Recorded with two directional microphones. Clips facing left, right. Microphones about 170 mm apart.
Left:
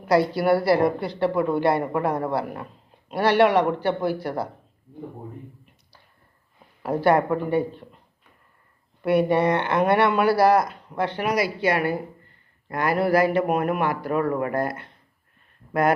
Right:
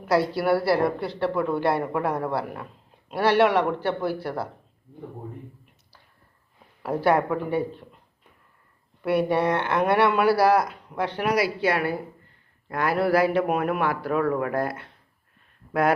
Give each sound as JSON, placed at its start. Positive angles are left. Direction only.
{"t": 0.0, "sound": "speech", "side_deg": -5}
{"t": 7.2, "sound": "speech", "side_deg": 0}
{"t": 9.0, "sound": "speech", "side_deg": -5}